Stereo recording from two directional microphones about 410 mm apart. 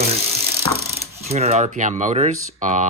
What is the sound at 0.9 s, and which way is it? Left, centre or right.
Mechanisms, centre.